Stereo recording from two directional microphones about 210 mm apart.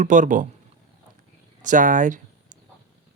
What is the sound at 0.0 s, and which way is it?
Speech, 35° right (ahead or behind).